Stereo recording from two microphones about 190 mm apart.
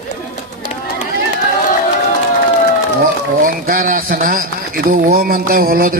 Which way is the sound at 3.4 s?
45° right (ahead or behind).